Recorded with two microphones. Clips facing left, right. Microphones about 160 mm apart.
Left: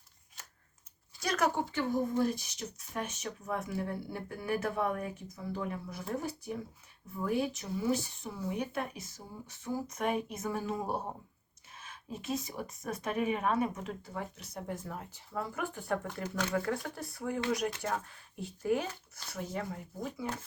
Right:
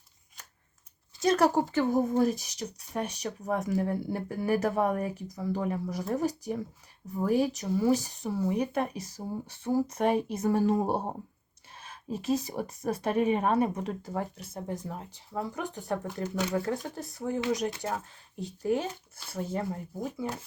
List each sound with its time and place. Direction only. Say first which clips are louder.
1.2 s speech: right 7 dB; 30° right (ahead or behind)
14.4 s speech: right 4 dB; 25° right (ahead or behind)